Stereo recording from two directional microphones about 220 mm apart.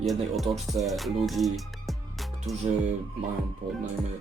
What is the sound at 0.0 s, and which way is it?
Music, centre (ahead or behind).